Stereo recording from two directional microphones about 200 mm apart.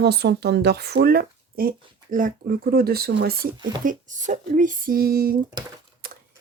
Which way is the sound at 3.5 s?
20° right (ahead or behind).